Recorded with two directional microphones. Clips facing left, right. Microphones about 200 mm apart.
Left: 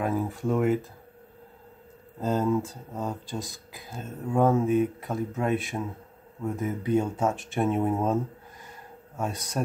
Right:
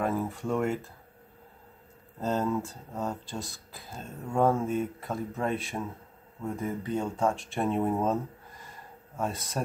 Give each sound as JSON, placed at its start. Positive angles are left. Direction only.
{"t": 0.0, "sound": "speech", "side_deg": 0}
{"t": 2.1, "sound": "speech", "side_deg": 0}
{"t": 3.3, "sound": "speech", "side_deg": 15}
{"t": 3.7, "sound": "speech", "side_deg": 0}